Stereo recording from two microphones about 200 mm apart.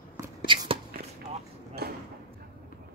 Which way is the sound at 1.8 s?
50° right (ahead or behind).